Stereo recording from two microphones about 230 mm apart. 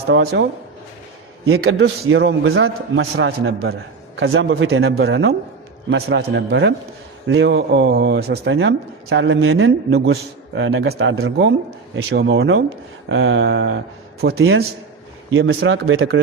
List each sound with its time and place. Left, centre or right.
0.1 s a man's voice: right
1.8 s a man's voice: right
4.8 s a man's voice: right